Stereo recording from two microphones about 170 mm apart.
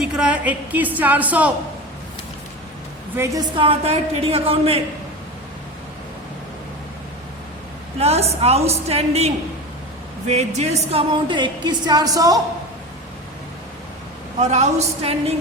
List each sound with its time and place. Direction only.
0.0 s a woman's voice: 5° right (ahead or behind)
3.2 s a woman's voice: 20° right (ahead or behind); by 4.8 s 35° right (ahead or behind)
7.9 s a woman's voice: 35° right (ahead or behind); by 12.4 s 20° right (ahead or behind)
14.3 s a woman's voice: 40° right (ahead or behind)